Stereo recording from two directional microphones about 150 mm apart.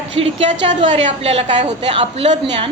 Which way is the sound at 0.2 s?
40° right (ahead or behind).